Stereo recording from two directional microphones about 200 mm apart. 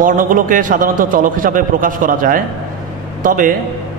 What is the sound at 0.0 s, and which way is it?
A man's voice, 45° right (ahead or behind).